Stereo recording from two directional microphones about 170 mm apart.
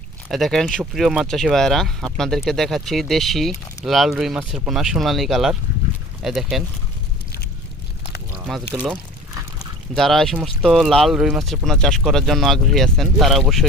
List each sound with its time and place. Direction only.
0.3 s speech: centre (ahead or behind)
8.4 s speech: 5° right (ahead or behind)